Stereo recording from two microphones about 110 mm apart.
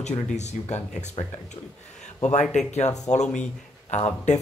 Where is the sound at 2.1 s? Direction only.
90° left.